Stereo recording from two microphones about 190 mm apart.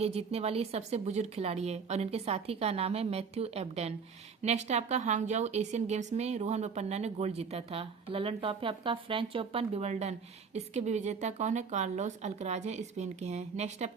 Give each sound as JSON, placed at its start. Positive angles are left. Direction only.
{"t": 0.0, "sound": "a woman's voice", "side_deg": -35}